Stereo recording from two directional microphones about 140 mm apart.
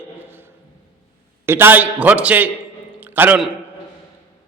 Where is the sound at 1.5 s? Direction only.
15° right (ahead or behind).